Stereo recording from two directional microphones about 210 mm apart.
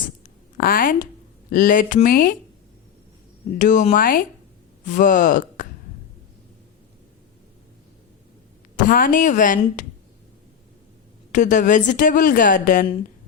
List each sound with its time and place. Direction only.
0.5 s a woman's voice: 40° left (ahead or behind)
3.6 s a woman's voice: 35° left (ahead or behind)
8.7 s a woman's voice: 40° left (ahead or behind)
11.3 s a woman's voice: 35° left (ahead or behind)